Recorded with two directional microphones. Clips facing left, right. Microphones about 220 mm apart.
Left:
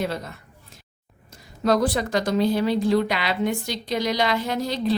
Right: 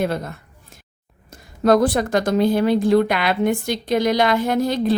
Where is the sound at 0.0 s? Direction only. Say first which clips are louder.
Right 5 dB; 50° right (ahead or behind).